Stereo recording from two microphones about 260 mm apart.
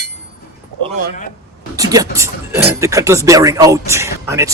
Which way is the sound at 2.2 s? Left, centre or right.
Centre.